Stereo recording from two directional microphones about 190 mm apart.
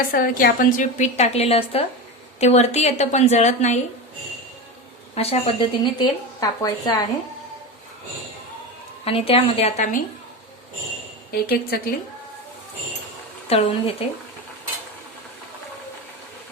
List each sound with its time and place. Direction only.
0.1 s a woman's voice: 50° left (ahead or behind)
5.1 s speech: 30° left (ahead or behind)
9.0 s a woman's voice: 30° left (ahead or behind)
11.3 s a woman's voice: 55° left (ahead or behind)
13.5 s a woman's voice: 30° left (ahead or behind)